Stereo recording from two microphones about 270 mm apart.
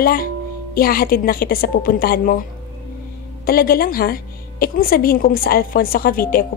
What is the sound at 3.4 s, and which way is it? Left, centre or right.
A woman's voice, left.